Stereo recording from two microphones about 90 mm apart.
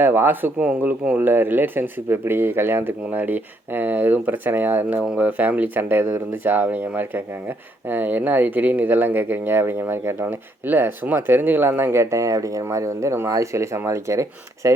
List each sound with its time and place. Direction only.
0.0 s speech: 25° right (ahead or behind)